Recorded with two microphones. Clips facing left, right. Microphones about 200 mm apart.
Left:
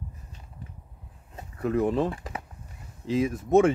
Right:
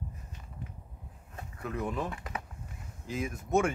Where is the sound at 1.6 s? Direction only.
35° left (ahead or behind).